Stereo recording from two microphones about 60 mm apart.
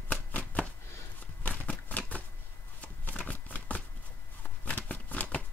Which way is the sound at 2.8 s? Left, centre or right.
Left.